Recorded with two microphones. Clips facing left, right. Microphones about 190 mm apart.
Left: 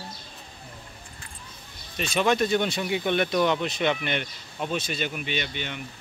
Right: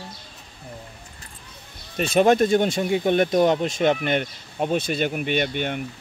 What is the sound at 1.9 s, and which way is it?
Speech, 50° right (ahead or behind).